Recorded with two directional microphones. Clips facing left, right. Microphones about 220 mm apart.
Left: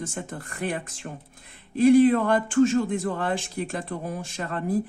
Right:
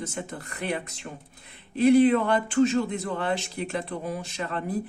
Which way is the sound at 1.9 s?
50° left (ahead or behind).